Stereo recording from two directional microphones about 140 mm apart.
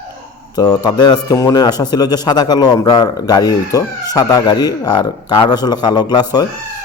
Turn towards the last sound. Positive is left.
turn(degrees=30)  # may be behind; listen again after turning